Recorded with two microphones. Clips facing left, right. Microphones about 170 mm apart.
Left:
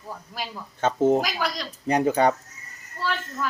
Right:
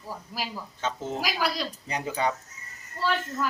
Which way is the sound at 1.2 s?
10° right (ahead or behind).